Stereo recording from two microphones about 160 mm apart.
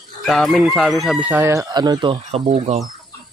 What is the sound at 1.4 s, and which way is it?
Speech, 20° right (ahead or behind).